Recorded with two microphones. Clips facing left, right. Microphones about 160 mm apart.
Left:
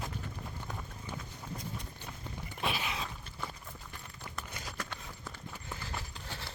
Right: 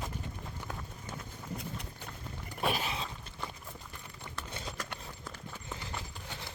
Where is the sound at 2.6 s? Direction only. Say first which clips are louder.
Right 3 dB; 45° right (ahead or behind).